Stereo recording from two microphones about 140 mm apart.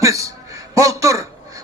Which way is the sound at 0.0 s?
25° right (ahead or behind).